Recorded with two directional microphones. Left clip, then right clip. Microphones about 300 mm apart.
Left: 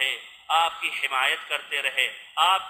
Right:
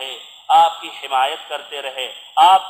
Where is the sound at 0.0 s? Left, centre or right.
Centre.